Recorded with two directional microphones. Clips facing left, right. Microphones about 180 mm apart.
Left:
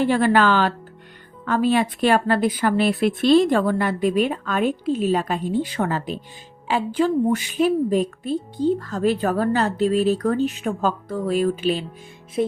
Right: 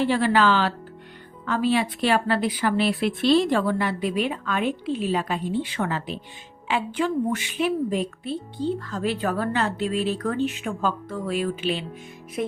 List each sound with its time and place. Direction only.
0.0 s a woman's voice: 50° left (ahead or behind)
12.4 s speech: 30° left (ahead or behind)